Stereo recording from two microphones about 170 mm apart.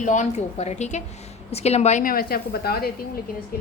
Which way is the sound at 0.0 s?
45° left (ahead or behind).